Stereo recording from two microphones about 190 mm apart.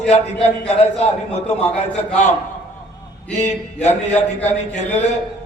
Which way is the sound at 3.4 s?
35° left (ahead or behind).